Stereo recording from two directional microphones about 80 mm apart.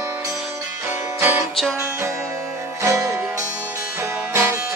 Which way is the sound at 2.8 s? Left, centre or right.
Right.